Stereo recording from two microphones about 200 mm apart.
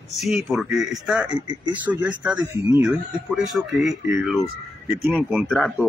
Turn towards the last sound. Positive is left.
turn(degrees=-5)  # may be behind; listen again after turning